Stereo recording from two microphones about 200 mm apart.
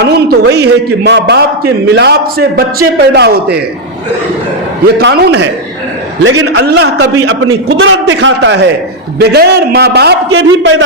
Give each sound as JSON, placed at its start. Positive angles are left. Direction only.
{"t": 0.0, "sound": "a man's voice", "side_deg": -55}
{"t": 4.9, "sound": "a man's voice", "side_deg": -55}
{"t": 7.7, "sound": "a man's voice", "side_deg": -70}
{"t": 10.3, "sound": "a man's voice", "side_deg": -70}